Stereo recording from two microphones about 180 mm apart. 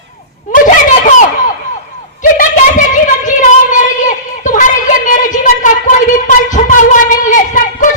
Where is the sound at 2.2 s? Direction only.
45° left (ahead or behind).